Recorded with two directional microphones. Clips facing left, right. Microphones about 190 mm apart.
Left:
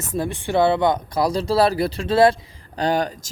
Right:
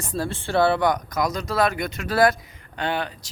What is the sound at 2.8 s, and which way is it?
Speech, 40° left (ahead or behind).